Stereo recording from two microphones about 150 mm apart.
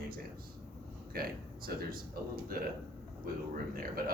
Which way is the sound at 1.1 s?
80° right.